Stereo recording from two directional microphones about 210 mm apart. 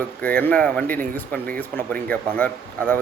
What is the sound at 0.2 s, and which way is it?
Speech, 5° left (ahead or behind).